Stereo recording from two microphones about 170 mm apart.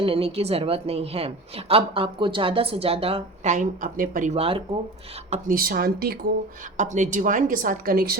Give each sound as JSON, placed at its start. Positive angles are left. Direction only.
{"t": 0.0, "sound": "a woman's voice", "side_deg": -35}
{"t": 4.4, "sound": "a woman's voice", "side_deg": -35}
{"t": 5.3, "sound": "speech", "side_deg": -55}
{"t": 6.7, "sound": "speech", "side_deg": -45}